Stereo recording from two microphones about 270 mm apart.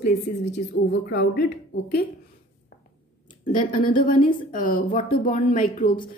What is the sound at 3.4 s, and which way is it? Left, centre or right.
A man's voice, left.